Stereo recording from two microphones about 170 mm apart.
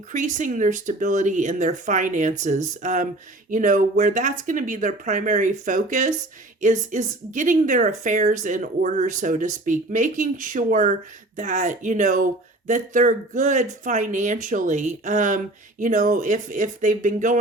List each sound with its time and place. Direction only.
0.1 s speech: 45° right (ahead or behind)